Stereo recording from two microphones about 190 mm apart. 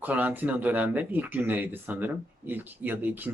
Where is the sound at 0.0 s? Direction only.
10° right (ahead or behind).